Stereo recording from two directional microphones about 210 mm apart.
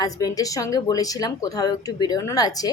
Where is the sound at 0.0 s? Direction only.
15° left (ahead or behind).